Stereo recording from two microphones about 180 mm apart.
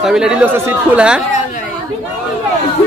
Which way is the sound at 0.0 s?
5° right (ahead or behind).